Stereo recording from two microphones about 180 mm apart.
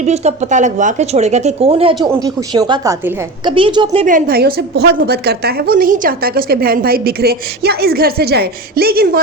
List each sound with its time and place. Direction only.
0.0 s speech: 40° right (ahead or behind)
4.0 s a woman's voice: 50° right (ahead or behind)